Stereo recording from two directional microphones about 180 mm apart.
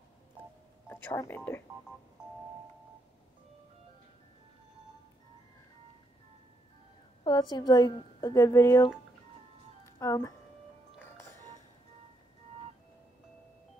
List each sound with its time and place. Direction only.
0.8 s speech: 10° left (ahead or behind)
2.2 s doorbell: 5° right (ahead or behind)
7.2 s a woman's voice: 25° left (ahead or behind)
9.8 s speech: 15° left (ahead or behind)
11.0 s music: 15° left (ahead or behind)